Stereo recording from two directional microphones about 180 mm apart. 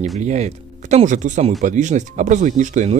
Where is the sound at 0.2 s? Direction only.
40° right (ahead or behind).